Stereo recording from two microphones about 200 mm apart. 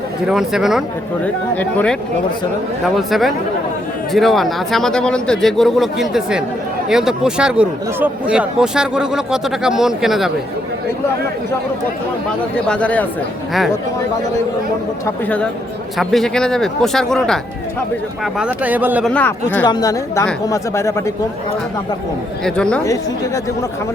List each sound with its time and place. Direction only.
0.3 s speech: centre (ahead or behind)
12.5 s speech: 5° left (ahead or behind)
15.0 s a woman's voice: 5° left (ahead or behind); by 19.0 s 10° right (ahead or behind)
19.0 s a woman's voice: 5° left (ahead or behind)
19.6 s a woman's voice: 20° left (ahead or behind)
22.4 s speech: 5° left (ahead or behind)
22.8 s a woman's voice: 15° left (ahead or behind)